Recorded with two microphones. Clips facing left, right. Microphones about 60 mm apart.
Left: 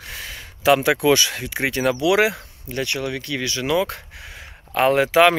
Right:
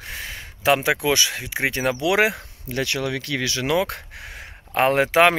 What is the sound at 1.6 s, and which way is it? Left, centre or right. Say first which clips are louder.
Speech: left 2 dB; right.